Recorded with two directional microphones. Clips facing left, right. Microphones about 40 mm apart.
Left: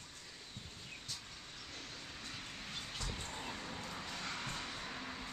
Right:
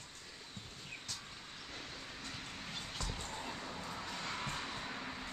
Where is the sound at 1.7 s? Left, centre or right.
Centre.